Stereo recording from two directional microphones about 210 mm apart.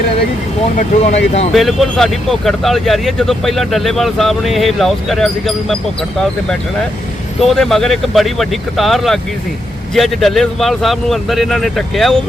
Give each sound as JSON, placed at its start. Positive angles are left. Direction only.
{"t": 0.8, "sound": "speech", "side_deg": 30}
{"t": 1.5, "sound": "speech", "side_deg": 0}
{"t": 7.4, "sound": "speech", "side_deg": 0}